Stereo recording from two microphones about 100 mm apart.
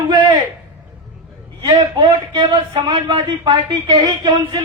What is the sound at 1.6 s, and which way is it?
Speech, 50° right (ahead or behind).